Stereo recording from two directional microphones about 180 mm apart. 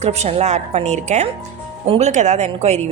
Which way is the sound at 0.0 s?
35° right (ahead or behind).